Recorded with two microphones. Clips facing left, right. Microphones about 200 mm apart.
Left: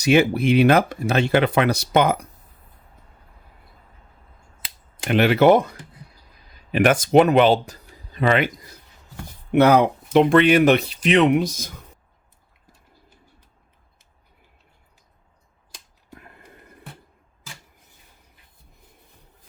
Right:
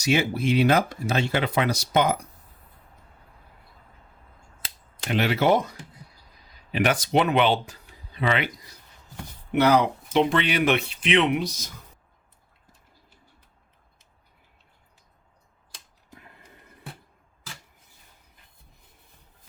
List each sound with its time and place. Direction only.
0.0 s speech: 60° left (ahead or behind)
5.0 s speech: 60° left (ahead or behind)